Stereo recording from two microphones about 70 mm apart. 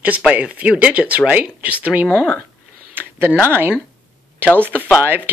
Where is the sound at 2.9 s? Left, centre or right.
Right.